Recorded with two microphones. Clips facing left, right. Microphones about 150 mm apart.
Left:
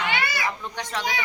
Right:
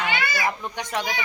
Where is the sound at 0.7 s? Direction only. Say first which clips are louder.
Right 1 dB; 15° right (ahead or behind).